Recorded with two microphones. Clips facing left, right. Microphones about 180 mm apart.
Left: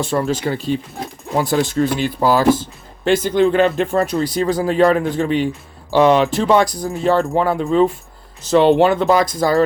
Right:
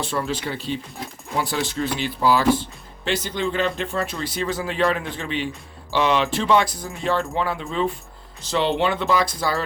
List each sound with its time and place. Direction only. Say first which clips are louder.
0.0 s speech: left 7 dB; 45° left (ahead or behind)